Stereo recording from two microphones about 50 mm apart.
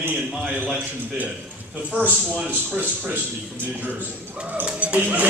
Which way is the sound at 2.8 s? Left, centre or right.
Right.